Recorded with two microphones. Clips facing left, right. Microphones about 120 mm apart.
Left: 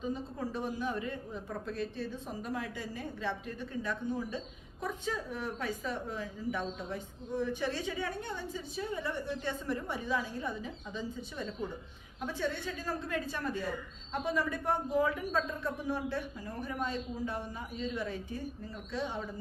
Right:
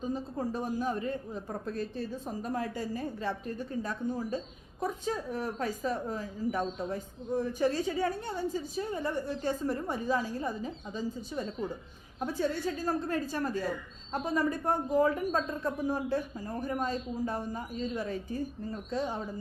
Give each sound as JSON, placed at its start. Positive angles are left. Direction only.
{"t": 0.0, "sound": "a woman's voice", "side_deg": -40}